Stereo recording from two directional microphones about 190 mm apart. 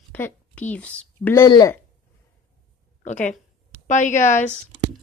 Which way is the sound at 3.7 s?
40° left (ahead or behind).